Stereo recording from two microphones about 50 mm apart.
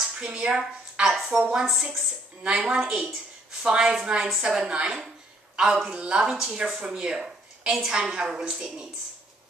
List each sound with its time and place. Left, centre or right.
0.2 s speech: centre